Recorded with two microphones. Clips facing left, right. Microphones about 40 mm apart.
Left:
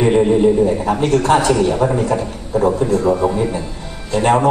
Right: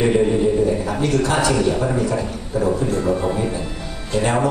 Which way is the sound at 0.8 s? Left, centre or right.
Left.